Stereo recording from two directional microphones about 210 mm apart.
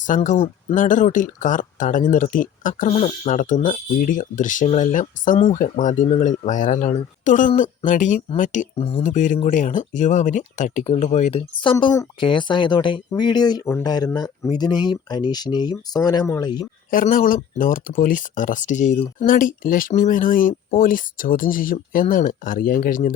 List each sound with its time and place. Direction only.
0.0 s speech: 35° left (ahead or behind)
9.0 s speech: 40° left (ahead or behind); by 16.6 s 20° left (ahead or behind)
16.9 s speech: 40° left (ahead or behind)